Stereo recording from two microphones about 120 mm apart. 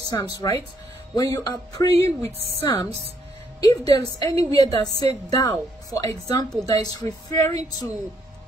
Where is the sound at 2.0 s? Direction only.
55° right (ahead or behind).